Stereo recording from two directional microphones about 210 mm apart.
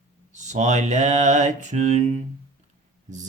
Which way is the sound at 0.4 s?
35° right (ahead or behind).